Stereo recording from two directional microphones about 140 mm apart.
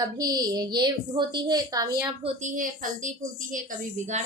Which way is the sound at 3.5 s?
55° right (ahead or behind).